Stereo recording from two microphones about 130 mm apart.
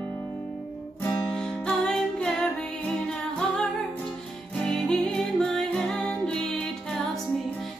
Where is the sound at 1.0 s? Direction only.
15° left (ahead or behind).